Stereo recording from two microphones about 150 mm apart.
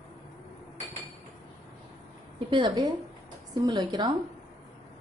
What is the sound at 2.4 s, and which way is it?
A woman's voice, 30° right (ahead or behind).